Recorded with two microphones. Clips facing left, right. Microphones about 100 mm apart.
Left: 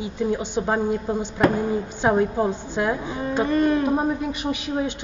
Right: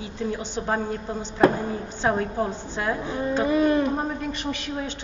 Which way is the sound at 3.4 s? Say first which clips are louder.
Left 1 dB; 5° right (ahead or behind).